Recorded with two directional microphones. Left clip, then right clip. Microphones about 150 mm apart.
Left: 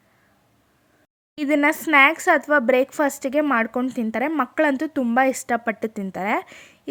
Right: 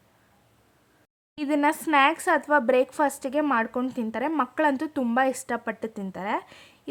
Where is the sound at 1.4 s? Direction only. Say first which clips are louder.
Left 4 dB; 25° left (ahead or behind).